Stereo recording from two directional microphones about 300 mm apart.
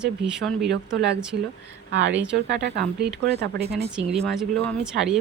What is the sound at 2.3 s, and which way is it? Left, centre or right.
Speech, right.